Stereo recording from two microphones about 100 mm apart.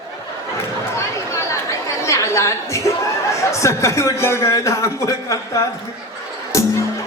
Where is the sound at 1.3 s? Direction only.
30° left (ahead or behind).